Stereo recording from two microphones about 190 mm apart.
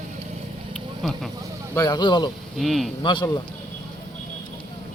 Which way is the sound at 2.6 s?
Centre (ahead or behind).